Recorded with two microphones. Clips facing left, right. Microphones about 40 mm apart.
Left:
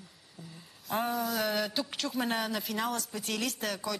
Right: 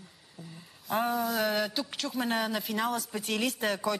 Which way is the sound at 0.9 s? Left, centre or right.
Centre.